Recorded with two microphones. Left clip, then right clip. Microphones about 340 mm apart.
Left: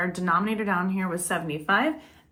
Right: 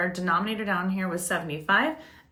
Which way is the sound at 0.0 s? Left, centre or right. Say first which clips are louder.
Left 1 dB; centre.